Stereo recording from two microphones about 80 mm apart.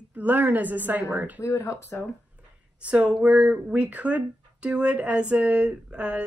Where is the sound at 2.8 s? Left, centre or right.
Centre.